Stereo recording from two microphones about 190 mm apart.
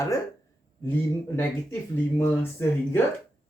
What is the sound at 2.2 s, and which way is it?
Speech, 10° left (ahead or behind).